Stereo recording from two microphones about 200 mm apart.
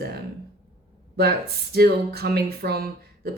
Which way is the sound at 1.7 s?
50° right (ahead or behind).